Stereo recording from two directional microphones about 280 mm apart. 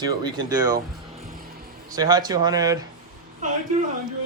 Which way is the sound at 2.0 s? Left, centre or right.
Centre.